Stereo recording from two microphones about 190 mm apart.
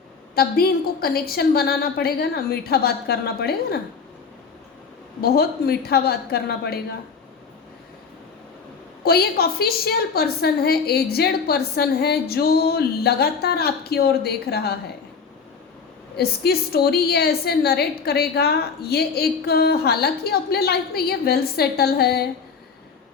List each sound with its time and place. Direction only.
0.3 s a woman's voice: 55° left (ahead or behind)
5.2 s a woman's voice: 55° left (ahead or behind)
9.0 s a woman's voice: 55° left (ahead or behind)
16.1 s a woman's voice: 55° left (ahead or behind)